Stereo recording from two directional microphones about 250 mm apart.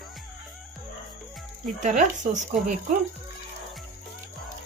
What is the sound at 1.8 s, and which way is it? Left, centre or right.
Speech, right.